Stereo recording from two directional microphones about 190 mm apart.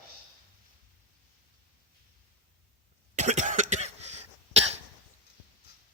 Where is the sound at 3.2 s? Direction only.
40° right (ahead or behind).